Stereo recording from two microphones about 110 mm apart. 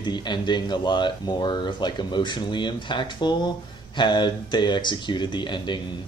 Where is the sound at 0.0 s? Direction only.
40° left (ahead or behind).